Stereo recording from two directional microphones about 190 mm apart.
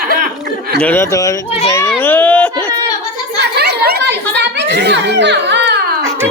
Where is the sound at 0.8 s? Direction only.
10° left (ahead or behind).